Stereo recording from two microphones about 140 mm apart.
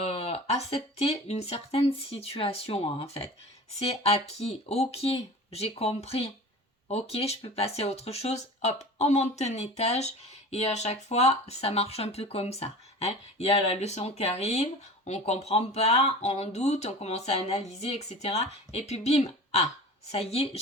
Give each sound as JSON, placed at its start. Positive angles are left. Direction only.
{"t": 0.0, "sound": "speech", "side_deg": 45}